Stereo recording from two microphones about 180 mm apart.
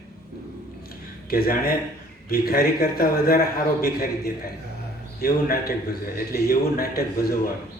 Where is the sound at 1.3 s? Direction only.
55° left (ahead or behind).